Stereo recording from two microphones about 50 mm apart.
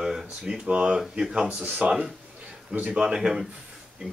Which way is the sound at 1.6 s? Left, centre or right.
Right.